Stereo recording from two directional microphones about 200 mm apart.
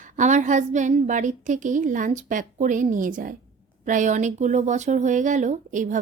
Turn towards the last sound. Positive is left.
turn(degrees=-40)  # may be behind; listen again after turning